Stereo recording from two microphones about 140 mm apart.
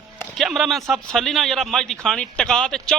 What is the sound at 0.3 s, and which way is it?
A man's voice, centre (ahead or behind).